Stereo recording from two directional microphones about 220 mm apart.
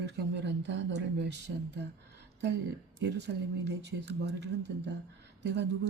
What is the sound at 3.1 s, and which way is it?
Speech, 50° right (ahead or behind).